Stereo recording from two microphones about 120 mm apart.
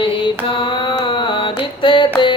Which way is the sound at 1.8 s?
45° left (ahead or behind).